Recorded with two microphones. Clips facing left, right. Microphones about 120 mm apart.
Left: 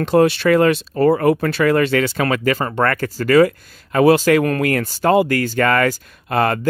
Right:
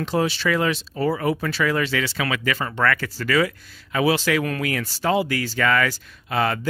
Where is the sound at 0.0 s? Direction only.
55° left (ahead or behind).